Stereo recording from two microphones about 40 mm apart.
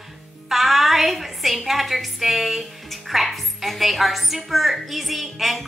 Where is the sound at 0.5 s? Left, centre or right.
Centre.